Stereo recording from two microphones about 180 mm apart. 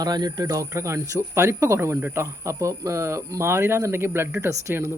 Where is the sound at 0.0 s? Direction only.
20° right (ahead or behind).